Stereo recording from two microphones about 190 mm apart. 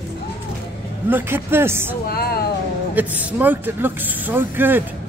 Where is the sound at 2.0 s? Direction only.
55° left (ahead or behind).